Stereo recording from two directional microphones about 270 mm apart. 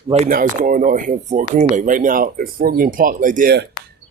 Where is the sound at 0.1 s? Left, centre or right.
Right.